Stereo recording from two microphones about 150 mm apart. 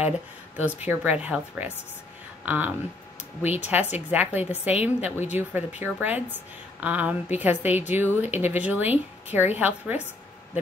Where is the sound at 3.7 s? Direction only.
10° right (ahead or behind).